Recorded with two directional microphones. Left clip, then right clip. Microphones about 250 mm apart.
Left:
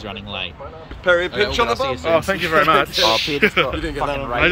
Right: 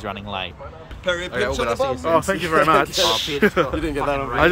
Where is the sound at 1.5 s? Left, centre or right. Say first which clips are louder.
Left 2 dB; centre.